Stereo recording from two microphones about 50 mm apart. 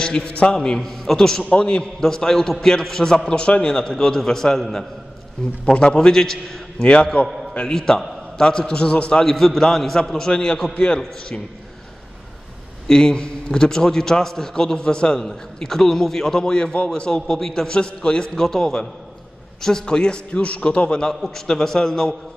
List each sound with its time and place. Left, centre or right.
0.0 s a man's voice: centre
1.5 s a man's voice: centre
5.7 s a man's voice: centre
6.9 s a man's voice: left
9.2 s a man's voice: centre
12.8 s a man's voice: centre
17.3 s a man's voice: centre; by 21.1 s left
21.5 s a man's voice: centre